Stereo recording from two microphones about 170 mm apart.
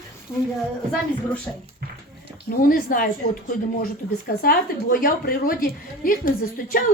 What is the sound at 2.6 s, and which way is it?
Speech, 55° left (ahead or behind).